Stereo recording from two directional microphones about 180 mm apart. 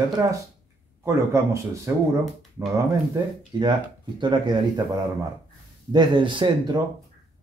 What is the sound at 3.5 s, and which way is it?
Speech, 25° right (ahead or behind).